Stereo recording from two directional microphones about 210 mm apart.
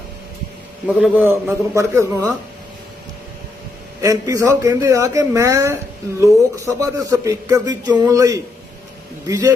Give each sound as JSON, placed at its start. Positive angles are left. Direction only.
{"t": 0.9, "sound": "speech", "side_deg": -5}
{"t": 4.0, "sound": "speech", "side_deg": -15}